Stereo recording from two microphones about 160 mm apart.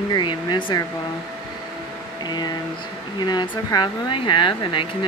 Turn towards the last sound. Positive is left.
turn(degrees=30)  # may be behind; listen again after turning